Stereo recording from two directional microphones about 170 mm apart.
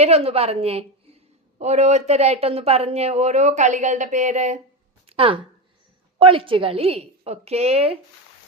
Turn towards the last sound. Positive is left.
turn(degrees=-35)  # may be behind; listen again after turning